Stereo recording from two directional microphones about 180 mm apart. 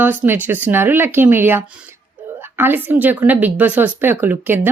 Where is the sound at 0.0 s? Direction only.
10° right (ahead or behind).